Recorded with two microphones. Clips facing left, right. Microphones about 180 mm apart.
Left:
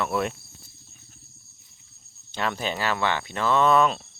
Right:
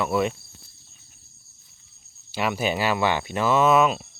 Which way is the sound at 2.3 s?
10° right (ahead or behind).